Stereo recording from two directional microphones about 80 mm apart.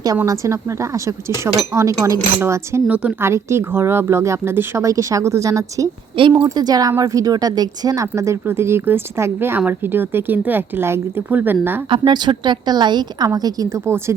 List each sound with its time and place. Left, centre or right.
0.3 s speech: right
2.8 s a woman's voice: centre
3.2 s speech: right
4.9 s a woman's voice: right
6.2 s speech: right
6.5 s a woman's voice: right
8.0 s speech: right
11.9 s a woman's voice: right